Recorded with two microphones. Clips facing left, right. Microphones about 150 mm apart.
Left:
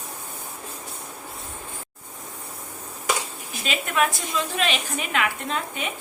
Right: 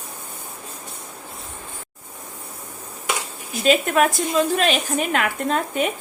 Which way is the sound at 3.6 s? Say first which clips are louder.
Right 7 dB; 45° right (ahead or behind).